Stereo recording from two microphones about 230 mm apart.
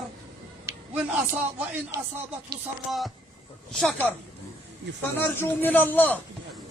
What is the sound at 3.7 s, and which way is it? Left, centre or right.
Speech, centre.